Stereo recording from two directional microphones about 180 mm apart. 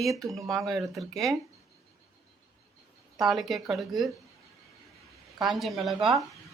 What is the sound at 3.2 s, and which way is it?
Speech, centre (ahead or behind).